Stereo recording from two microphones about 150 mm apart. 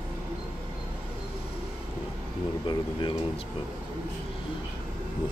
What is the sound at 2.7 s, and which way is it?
Speech, 35° left (ahead or behind).